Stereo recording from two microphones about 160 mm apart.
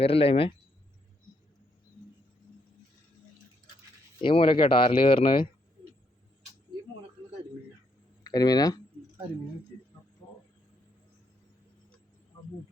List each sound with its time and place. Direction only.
0.0 s speech: 35° left (ahead or behind)
4.2 s speech: 30° left (ahead or behind)
8.2 s speech: 25° left (ahead or behind)